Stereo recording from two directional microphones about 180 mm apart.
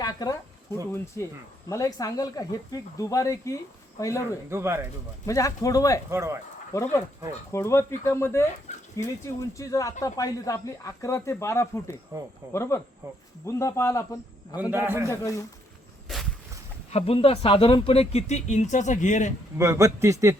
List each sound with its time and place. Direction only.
0.0 s a sound: 20° left (ahead or behind)
0.9 s speech: 15° left (ahead or behind)
4.4 s a man's voice: 15° right (ahead or behind)
5.2 s speech: 20° left (ahead or behind)
6.1 s a man's voice: 15° right (ahead or behind)
7.5 s speech: 15° left (ahead or behind)
8.7 s dog: 40° left (ahead or behind)
9.2 s speech: 15° left (ahead or behind)
14.6 s a man's voice: 10° right (ahead or behind)
15.1 s speech: 15° left (ahead or behind)
16.1 s a sound: centre (ahead or behind)
16.9 s speech: 35° left (ahead or behind)
19.5 s a man's voice: 15° right (ahead or behind)